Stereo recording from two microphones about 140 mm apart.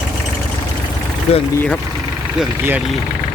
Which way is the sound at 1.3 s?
50° left (ahead or behind).